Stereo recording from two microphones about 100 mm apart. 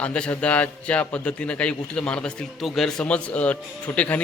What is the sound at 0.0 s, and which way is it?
A man's voice, 10° left (ahead or behind).